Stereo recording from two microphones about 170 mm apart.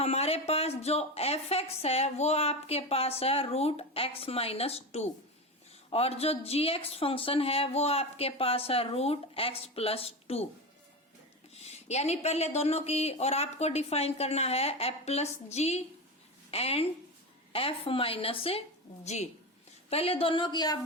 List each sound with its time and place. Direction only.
0.0 s a woman's voice: 35° left (ahead or behind)
11.5 s a woman's voice: 40° left (ahead or behind)